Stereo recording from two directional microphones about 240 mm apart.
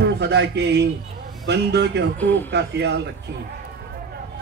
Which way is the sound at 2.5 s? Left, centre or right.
Right.